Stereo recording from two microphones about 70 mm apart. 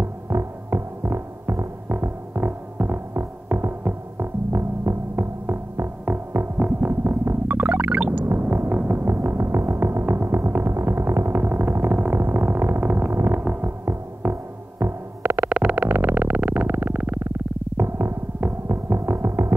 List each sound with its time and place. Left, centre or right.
0.0 s throbbing: right
6.9 s music: right
8.3 s music: right
15.5 s synthesizer: centre
17.7 s music: right